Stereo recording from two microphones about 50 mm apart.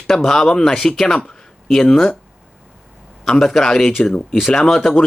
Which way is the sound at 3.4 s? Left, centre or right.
Centre.